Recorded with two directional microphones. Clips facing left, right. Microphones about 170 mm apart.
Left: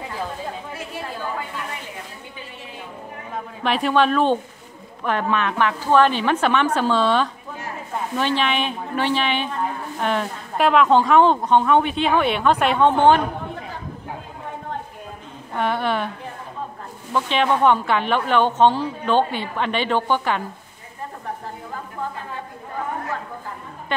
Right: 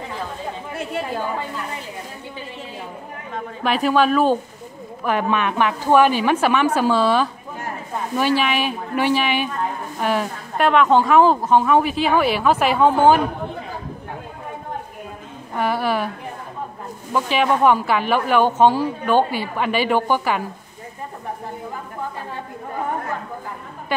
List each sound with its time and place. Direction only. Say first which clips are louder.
3.6 s a woman's voice: right 1 dB; centre (ahead or behind)
15.5 s a woman's voice: right 1 dB; 5° right (ahead or behind)
17.1 s speech: right 1 dB; 5° right (ahead or behind)